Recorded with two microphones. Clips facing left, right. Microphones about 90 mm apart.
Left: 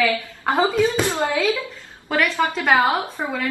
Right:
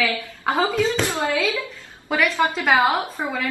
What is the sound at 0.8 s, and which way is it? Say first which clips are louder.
Speech: left 2 dB; 20° left (ahead or behind).